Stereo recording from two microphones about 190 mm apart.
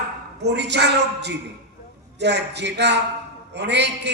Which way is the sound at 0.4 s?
65° right (ahead or behind).